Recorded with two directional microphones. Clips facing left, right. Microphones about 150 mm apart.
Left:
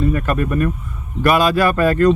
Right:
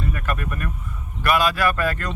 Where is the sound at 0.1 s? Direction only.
30° left (ahead or behind).